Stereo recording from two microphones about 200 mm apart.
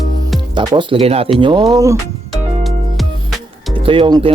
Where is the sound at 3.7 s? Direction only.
25° right (ahead or behind).